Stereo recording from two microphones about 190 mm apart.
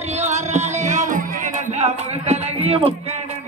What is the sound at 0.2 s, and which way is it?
Music, 35° right (ahead or behind).